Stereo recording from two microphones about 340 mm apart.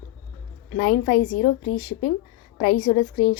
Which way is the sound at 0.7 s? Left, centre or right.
Left.